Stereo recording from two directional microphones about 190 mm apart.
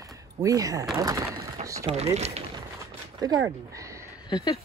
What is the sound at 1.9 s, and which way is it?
Speech, 35° right (ahead or behind).